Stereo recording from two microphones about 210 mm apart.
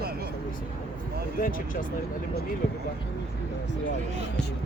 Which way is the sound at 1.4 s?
40° left (ahead or behind).